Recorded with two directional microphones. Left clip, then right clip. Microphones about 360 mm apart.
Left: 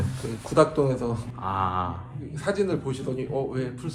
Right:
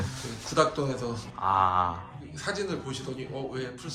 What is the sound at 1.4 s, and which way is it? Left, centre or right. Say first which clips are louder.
Speech: right 3 dB; centre.